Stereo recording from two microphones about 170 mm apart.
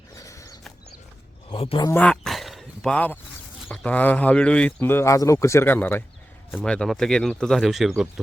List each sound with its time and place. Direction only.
0.2 s horse: 20° left (ahead or behind)
1.5 s speech: 30° left (ahead or behind)
1.9 s a sound: 5° left (ahead or behind)
3.8 s a man's voice: 10° left (ahead or behind)